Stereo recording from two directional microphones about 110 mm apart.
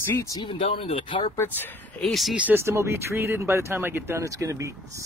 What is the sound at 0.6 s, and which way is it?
Speech, 55° left (ahead or behind).